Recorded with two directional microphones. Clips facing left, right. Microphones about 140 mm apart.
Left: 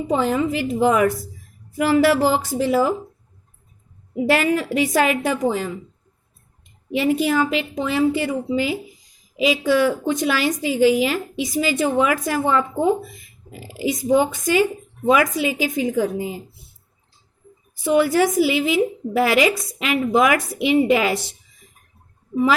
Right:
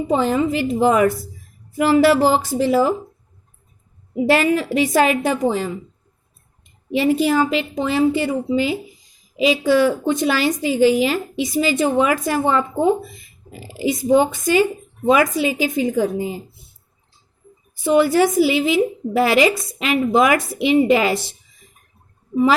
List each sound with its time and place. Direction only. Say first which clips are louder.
0.1 s a woman's voice: right 2 dB; 30° right (ahead or behind)
4.3 s a woman's voice: right 2 dB; 30° right (ahead or behind)
6.9 s a woman's voice: right 2 dB; 30° right (ahead or behind)
17.8 s a woman's voice: right 2 dB; 30° right (ahead or behind)